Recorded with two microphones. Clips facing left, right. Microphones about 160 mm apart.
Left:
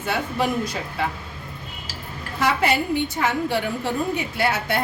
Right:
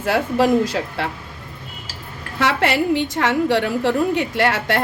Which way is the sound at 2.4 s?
85° right.